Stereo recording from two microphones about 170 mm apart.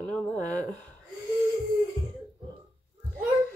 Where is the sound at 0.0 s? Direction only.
5° left (ahead or behind).